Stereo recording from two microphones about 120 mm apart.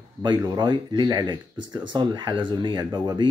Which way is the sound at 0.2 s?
40° right (ahead or behind).